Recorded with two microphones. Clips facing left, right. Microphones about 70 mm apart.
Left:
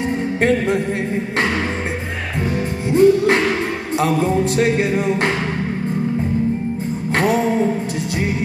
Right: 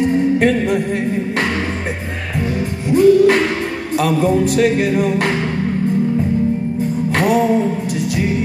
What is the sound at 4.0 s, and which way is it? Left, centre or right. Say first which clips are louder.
Music: right 2 dB; left.